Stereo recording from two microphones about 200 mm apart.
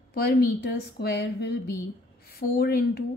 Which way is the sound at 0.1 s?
50° left (ahead or behind).